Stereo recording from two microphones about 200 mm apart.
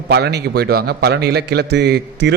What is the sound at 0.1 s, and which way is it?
A man's voice, 55° right (ahead or behind).